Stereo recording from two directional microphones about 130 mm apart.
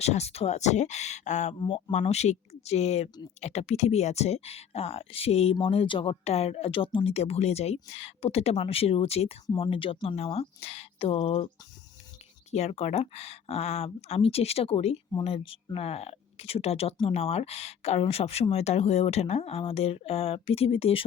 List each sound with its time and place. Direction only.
0.0 s speech: 55° left (ahead or behind)
12.5 s speech: 55° left (ahead or behind)